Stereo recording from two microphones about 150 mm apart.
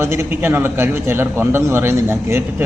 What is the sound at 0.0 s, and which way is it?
A man's voice, 15° right (ahead or behind).